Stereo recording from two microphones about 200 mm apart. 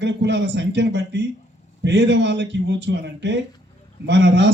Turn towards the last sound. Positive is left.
turn(degrees=-60)  # may be behind; listen again after turning